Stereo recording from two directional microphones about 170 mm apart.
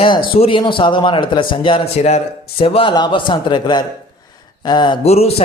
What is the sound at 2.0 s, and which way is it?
A man's voice, 40° left (ahead or behind).